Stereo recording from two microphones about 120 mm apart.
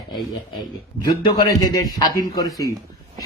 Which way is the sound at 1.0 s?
35° left (ahead or behind).